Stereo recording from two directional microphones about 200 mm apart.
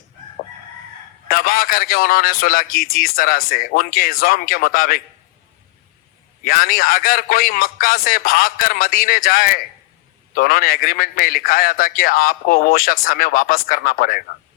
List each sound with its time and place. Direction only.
1.3 s a man's voice: 45° left (ahead or behind)
6.4 s a man's voice: 45° left (ahead or behind)